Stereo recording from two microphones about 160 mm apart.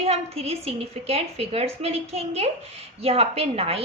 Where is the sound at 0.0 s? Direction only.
40° right (ahead or behind).